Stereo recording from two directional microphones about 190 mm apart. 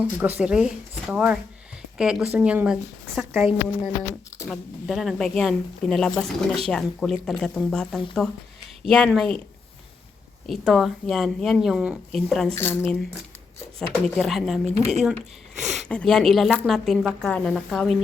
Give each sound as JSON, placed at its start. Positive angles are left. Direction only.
{"t": 0.0, "sound": "a woman's voice", "side_deg": -10}
{"t": 4.4, "sound": "speech", "side_deg": 0}
{"t": 10.4, "sound": "speech", "side_deg": 0}
{"t": 12.5, "sound": "speech", "side_deg": 15}
{"t": 13.7, "sound": "speech", "side_deg": 0}
{"t": 14.8, "sound": "speech", "side_deg": -35}
{"t": 15.5, "sound": "speech", "side_deg": 0}